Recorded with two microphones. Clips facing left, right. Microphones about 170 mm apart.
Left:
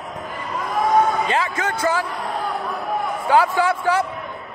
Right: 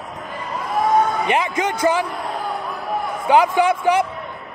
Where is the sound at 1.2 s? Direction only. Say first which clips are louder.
Right 2 dB; 20° right (ahead or behind).